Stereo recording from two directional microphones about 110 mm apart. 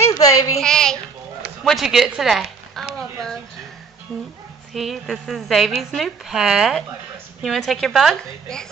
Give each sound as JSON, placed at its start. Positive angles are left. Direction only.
{"t": 0.2, "sound": "child singing", "side_deg": 30}
{"t": 0.6, "sound": "speech", "side_deg": 5}
{"t": 4.7, "sound": "a woman's voice", "side_deg": 0}